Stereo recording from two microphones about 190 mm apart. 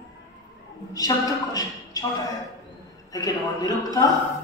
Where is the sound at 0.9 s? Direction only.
20° left (ahead or behind).